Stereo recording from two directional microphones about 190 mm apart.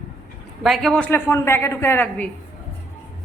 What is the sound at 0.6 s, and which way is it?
A woman's voice, centre (ahead or behind).